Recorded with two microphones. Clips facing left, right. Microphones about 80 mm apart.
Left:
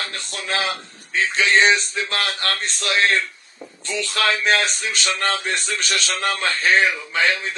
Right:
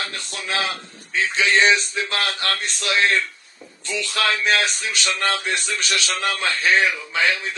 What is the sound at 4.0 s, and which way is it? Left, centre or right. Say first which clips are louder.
A man's voice: left 1 dB; left.